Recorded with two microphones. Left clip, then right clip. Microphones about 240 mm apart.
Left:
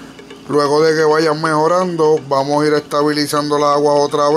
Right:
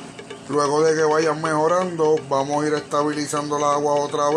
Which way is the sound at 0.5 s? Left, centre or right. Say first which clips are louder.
Left 6 dB; left.